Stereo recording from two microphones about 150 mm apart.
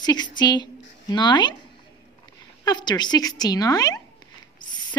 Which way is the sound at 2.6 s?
25° left (ahead or behind).